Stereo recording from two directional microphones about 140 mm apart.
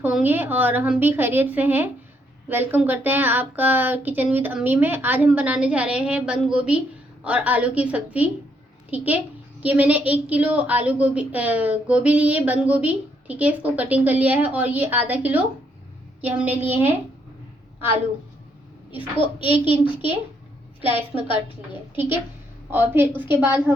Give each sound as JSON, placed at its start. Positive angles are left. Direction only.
{"t": 0.0, "sound": "a woman's voice", "side_deg": -10}
{"t": 19.2, "sound": "a child's voice", "side_deg": 35}
{"t": 22.7, "sound": "a woman's voice", "side_deg": -15}